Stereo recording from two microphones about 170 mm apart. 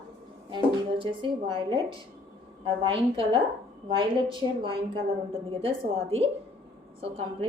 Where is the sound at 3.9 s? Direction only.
30° right (ahead or behind).